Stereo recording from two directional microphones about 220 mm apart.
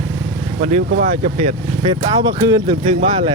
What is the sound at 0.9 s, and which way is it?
Speech, 35° right (ahead or behind).